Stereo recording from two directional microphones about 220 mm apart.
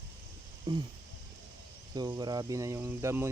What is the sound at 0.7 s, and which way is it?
Speech, 15° right (ahead or behind).